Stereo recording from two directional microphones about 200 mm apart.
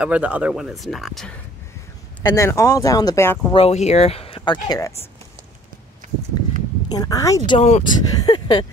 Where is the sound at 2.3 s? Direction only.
15° left (ahead or behind).